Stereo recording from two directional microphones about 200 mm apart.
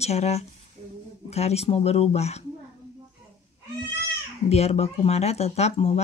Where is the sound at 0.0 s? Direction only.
30° left (ahead or behind).